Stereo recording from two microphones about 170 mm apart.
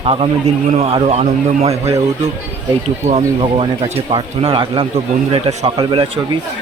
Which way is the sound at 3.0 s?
35° right (ahead or behind).